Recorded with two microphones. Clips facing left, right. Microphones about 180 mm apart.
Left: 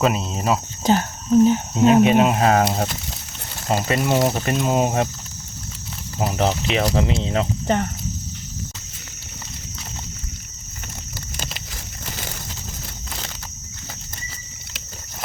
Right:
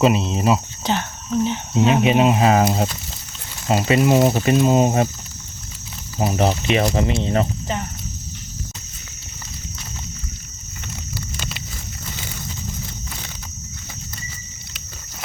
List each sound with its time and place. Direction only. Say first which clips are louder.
0.0 s speech: right 4 dB; centre (ahead or behind)
0.9 s speech: left 5 dB; 40° left (ahead or behind)
2.0 s speech: left 1 dB; 5° right (ahead or behind)
6.1 s speech: right 2 dB; centre (ahead or behind)